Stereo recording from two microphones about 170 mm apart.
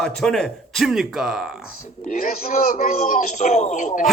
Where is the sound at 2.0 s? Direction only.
55° left (ahead or behind).